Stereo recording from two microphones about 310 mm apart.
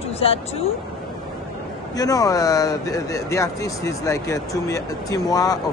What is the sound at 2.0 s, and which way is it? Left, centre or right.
Speech, centre.